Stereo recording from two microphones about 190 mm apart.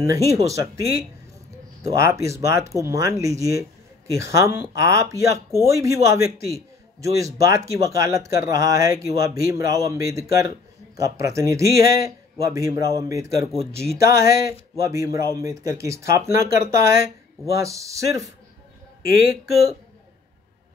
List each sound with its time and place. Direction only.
0.0 s speech: 15° right (ahead or behind)